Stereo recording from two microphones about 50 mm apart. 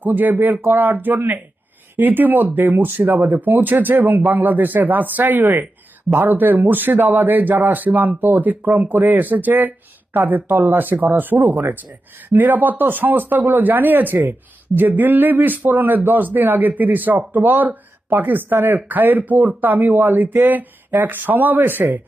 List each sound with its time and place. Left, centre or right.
0.0 s a man's voice: right